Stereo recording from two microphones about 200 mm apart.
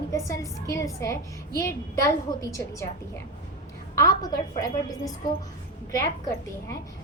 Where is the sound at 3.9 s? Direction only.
20° left (ahead or behind).